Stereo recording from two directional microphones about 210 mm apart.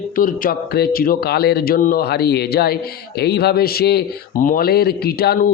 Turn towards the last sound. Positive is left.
turn(degrees=50)  # may be behind; listen again after turning